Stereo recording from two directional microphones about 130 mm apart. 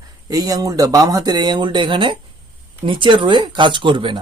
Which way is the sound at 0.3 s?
30° right (ahead or behind).